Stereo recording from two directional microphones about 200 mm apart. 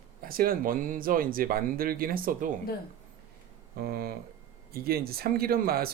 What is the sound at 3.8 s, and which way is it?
Speech, 50° right (ahead or behind).